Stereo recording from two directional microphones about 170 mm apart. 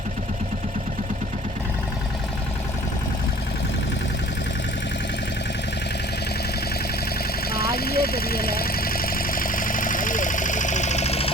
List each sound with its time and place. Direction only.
7.5 s vehicle: 65° left (ahead or behind); by 11.3 s 35° left (ahead or behind)